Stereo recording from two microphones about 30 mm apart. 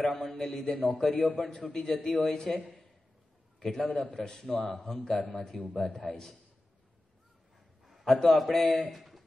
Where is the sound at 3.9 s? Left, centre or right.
Left.